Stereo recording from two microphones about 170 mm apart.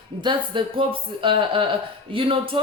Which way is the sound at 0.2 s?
30° right (ahead or behind).